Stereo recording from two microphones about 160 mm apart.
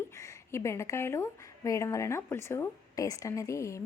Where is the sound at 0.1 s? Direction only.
20° left (ahead or behind).